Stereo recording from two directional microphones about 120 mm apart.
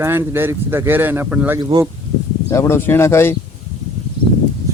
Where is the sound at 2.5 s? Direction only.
20° left (ahead or behind).